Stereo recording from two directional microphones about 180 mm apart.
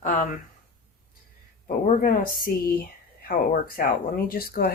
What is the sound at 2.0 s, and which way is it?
Speech, 55° left (ahead or behind).